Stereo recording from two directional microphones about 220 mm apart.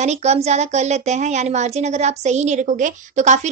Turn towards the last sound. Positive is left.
turn(degrees=-30)  # may be behind; listen again after turning